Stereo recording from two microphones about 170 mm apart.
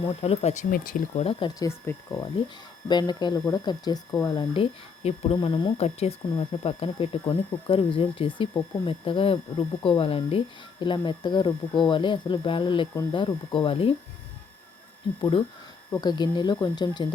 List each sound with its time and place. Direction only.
0.2 s speech: 40° left (ahead or behind)
0.7 s speech: 55° left (ahead or behind); by 4.4 s 20° left (ahead or behind)
4.5 s speech: 35° left (ahead or behind)
15.2 s speech: 30° left (ahead or behind)